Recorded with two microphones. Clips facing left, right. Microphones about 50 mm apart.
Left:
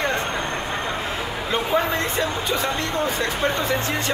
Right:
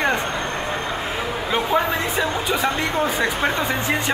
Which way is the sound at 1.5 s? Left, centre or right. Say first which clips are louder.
Right 1 dB; centre.